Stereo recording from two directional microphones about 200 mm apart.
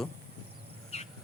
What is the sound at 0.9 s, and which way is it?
Bird, 35° left (ahead or behind).